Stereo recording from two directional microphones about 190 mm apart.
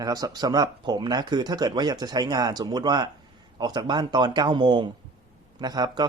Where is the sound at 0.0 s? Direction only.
20° right (ahead or behind).